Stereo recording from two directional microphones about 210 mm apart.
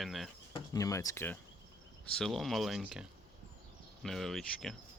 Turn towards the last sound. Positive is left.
turn(degrees=0)  # may be behind; listen again after turning